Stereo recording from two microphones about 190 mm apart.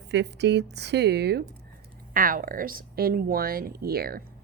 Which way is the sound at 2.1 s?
45° right (ahead or behind).